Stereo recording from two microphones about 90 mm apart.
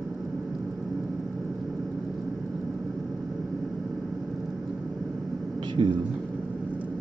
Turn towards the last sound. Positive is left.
turn(degrees=-65)  # may be behind; listen again after turning